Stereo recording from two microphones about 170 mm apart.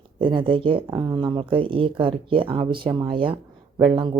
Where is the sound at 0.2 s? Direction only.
30° right (ahead or behind).